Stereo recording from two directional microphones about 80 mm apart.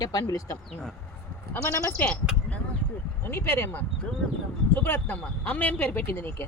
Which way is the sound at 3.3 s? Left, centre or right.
Left.